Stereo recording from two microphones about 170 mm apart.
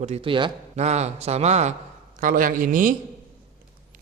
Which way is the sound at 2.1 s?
55° right (ahead or behind).